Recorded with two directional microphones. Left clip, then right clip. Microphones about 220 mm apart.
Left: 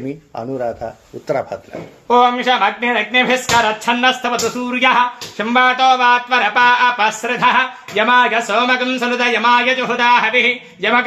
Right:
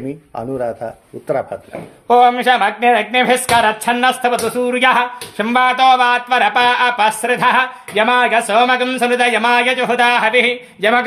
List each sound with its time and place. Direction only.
0.4 s speech: 10° right (ahead or behind)
2.0 s speech: 55° right (ahead or behind)